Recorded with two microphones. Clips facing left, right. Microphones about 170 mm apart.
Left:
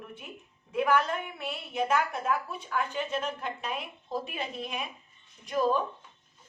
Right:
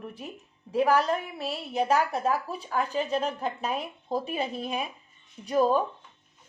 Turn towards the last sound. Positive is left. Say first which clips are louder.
# right 4 dB
turn(degrees=-35)  # may be behind; listen again after turning